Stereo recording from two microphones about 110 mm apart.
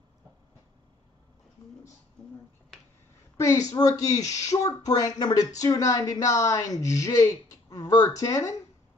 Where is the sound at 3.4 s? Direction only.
30° left (ahead or behind).